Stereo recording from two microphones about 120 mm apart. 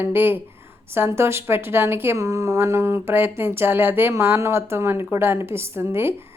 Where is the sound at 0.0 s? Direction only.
15° right (ahead or behind).